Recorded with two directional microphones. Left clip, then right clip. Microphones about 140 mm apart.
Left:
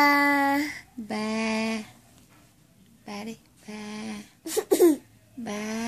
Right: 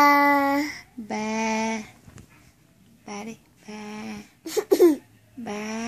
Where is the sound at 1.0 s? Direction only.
30° left (ahead or behind).